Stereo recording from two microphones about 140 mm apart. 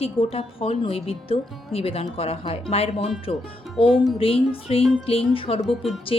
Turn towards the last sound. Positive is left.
turn(degrees=0)  # may be behind; listen again after turning